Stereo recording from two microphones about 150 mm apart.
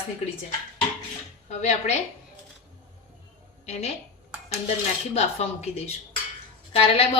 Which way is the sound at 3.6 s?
45° left (ahead or behind).